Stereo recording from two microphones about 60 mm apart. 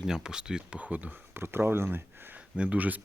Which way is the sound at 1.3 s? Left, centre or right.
Right.